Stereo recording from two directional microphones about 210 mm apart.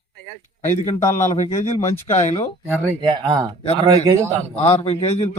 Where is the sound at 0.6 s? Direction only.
35° left (ahead or behind).